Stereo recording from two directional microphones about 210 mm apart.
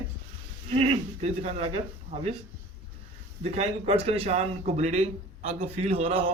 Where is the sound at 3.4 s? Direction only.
30° right (ahead or behind).